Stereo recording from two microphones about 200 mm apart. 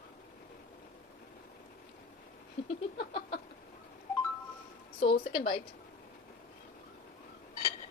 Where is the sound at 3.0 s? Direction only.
50° left (ahead or behind).